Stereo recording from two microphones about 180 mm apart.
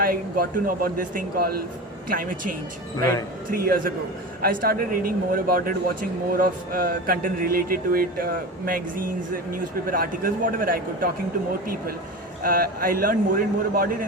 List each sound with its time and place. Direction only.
0.0 s a man's voice: 55° right (ahead or behind)